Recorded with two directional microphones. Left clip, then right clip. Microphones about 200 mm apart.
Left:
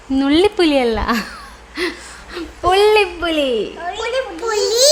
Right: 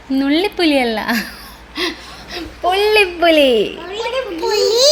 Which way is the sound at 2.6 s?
30° left (ahead or behind).